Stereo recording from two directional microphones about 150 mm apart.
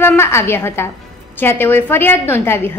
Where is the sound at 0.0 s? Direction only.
15° left (ahead or behind).